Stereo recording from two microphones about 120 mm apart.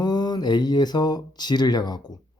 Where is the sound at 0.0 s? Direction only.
35° left (ahead or behind).